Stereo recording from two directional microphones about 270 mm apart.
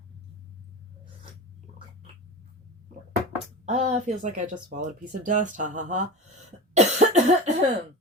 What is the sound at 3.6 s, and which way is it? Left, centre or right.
Speech, right.